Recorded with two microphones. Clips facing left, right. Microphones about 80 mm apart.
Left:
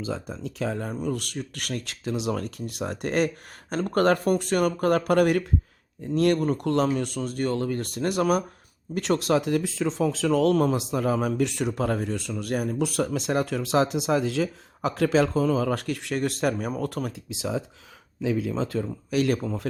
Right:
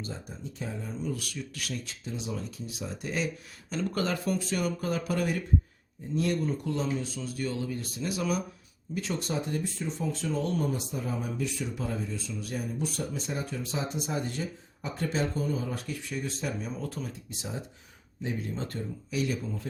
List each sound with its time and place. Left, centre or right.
0.3 s speech: left
9.0 s speech: left
19.1 s speech: left